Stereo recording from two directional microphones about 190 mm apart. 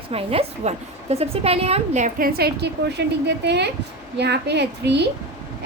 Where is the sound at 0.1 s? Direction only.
30° right (ahead or behind).